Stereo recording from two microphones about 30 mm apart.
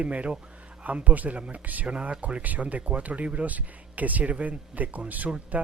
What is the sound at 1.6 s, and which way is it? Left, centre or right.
Speech, right.